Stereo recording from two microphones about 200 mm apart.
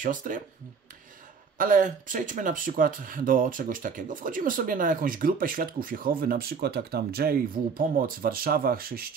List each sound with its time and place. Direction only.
0.0 s speech: 40° right (ahead or behind)
1.6 s speech: 40° right (ahead or behind)